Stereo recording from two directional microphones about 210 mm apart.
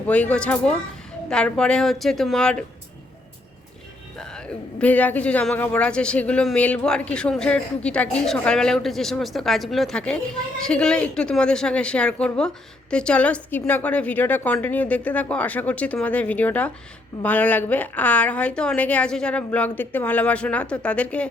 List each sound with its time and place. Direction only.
0.1 s a woman's voice: 5° left (ahead or behind)
4.2 s a man's voice: 5° left (ahead or behind)